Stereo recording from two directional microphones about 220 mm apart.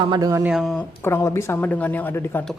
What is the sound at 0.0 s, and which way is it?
Speech, 20° right (ahead or behind).